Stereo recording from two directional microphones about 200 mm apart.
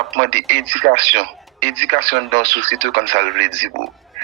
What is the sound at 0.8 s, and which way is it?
Speech, 50° right (ahead or behind).